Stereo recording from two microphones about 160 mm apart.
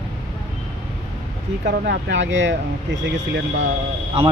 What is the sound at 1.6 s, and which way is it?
Speech, 90° right.